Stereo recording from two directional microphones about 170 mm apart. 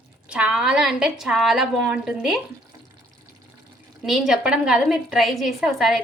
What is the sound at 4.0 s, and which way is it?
A woman's voice, centre (ahead or behind).